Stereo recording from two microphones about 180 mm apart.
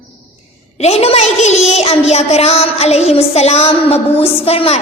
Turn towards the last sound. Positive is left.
turn(degrees=35)  # may be behind; listen again after turning